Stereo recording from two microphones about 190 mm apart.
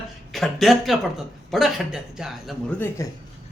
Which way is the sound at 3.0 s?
15° left (ahead or behind).